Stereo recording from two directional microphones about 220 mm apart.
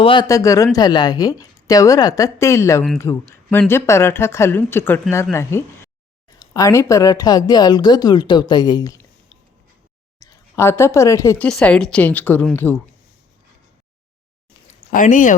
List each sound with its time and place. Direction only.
0.0 s speech: 20° left (ahead or behind)
10.2 s speech: 15° left (ahead or behind)
14.7 s speech: 35° left (ahead or behind)